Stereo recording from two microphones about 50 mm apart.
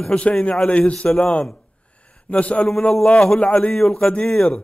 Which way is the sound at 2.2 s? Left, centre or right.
Left.